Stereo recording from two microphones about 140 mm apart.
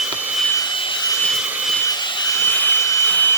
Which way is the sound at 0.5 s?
30° left (ahead or behind).